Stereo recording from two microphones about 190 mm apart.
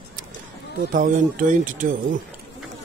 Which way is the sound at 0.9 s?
45° right (ahead or behind).